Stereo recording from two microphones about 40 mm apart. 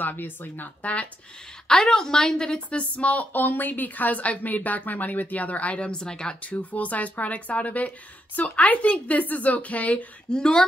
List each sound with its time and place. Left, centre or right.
0.0 s a woman's voice: left
1.7 s a woman's voice: centre
2.8 s speech: left
3.3 s a woman's voice: left
6.4 s speech: left
10.3 s a woman's voice: centre